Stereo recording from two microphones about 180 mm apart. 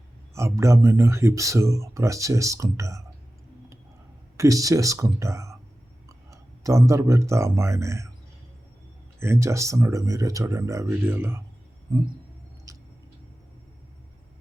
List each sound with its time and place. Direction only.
0.3 s speech: 15° right (ahead or behind)
4.4 s speech: 20° right (ahead or behind)
9.1 s speech: 15° right (ahead or behind)
12.7 s a sound: 20° right (ahead or behind)